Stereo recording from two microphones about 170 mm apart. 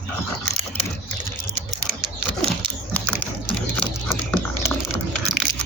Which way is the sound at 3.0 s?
5° left (ahead or behind).